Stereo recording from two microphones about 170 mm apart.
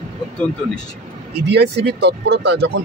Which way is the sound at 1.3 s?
75° right (ahead or behind).